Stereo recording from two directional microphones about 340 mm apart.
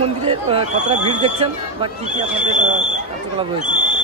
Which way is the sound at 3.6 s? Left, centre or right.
Right.